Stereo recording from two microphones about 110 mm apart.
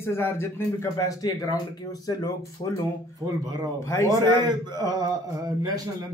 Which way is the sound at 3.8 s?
25° left (ahead or behind).